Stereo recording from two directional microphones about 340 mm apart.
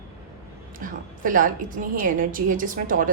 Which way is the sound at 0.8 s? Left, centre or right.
Right.